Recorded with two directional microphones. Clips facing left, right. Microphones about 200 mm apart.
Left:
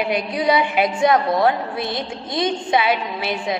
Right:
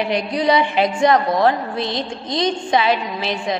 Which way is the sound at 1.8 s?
20° right (ahead or behind).